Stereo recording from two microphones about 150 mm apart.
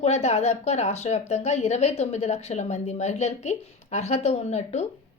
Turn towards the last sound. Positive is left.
turn(degrees=45)  # may be behind; listen again after turning